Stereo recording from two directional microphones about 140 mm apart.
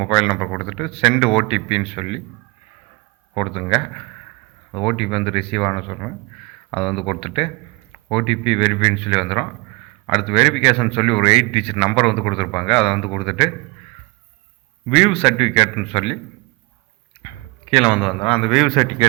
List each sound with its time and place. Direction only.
0.0 s speech: 40° left (ahead or behind)
0.7 s a man's voice: 45° left (ahead or behind)
3.3 s speech: 40° left (ahead or behind)
6.9 s a man's voice: 40° left (ahead or behind)
14.8 s a man's voice: 45° left (ahead or behind)
17.7 s speech: 40° left (ahead or behind)